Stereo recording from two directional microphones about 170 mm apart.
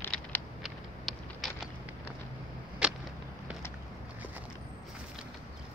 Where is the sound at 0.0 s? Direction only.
10° left (ahead or behind).